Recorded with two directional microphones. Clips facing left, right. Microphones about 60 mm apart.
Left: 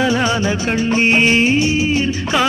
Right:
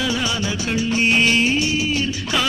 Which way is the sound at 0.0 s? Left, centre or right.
Left.